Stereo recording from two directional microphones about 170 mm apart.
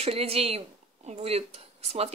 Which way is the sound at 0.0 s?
35° right (ahead or behind).